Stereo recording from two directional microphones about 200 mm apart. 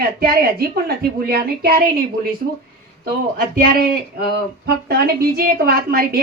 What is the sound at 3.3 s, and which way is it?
A woman's voice, 45° right (ahead or behind).